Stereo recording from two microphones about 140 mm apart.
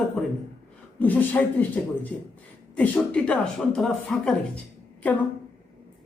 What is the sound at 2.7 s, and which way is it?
Speech, 10° left (ahead or behind).